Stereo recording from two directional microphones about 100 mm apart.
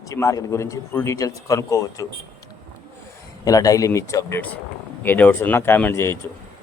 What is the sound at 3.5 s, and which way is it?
Speech, 35° left (ahead or behind).